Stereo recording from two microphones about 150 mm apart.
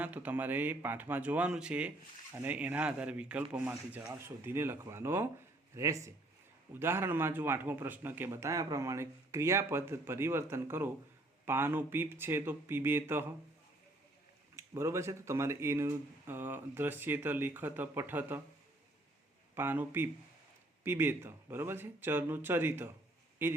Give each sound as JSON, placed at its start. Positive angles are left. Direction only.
{"t": 0.0, "sound": "a man's voice", "side_deg": -10}
{"t": 14.5, "sound": "a man's voice", "side_deg": -20}
{"t": 19.5, "sound": "a man's voice", "side_deg": -15}